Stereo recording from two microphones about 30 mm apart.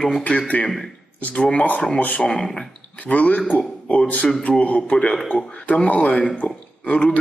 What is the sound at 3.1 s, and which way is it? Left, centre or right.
Speech, left.